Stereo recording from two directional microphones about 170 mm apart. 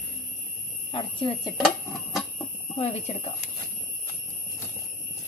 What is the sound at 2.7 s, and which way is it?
Speech, 40° left (ahead or behind).